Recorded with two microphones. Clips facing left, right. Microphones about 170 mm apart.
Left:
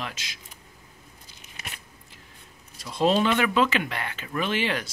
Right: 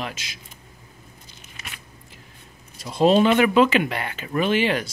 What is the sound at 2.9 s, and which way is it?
Speech, 10° right (ahead or behind).